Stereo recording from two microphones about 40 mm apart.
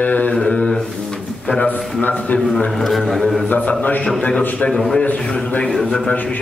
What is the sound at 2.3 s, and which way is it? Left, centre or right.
Speech, centre.